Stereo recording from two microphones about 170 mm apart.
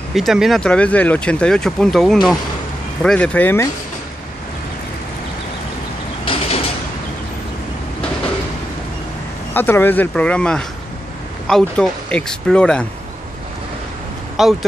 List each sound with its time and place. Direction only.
0.1 s speech: centre (ahead or behind); by 3.7 s 15° left (ahead or behind)
6.2 s mechanisms: 30° left (ahead or behind)
9.5 s speech: 10° left (ahead or behind)
14.3 s speech: centre (ahead or behind)